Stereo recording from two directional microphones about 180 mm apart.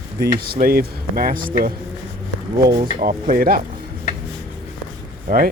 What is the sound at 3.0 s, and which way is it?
Speech, 50° right (ahead or behind).